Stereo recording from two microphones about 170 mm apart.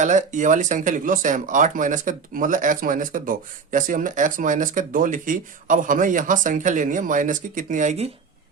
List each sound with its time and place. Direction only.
0.0 s speech: 45° right (ahead or behind)